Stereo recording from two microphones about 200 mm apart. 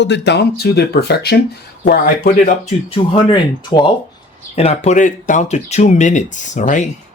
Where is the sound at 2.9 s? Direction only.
25° left (ahead or behind).